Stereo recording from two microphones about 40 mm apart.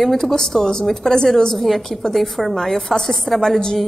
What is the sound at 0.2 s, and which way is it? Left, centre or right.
A woman's voice, centre.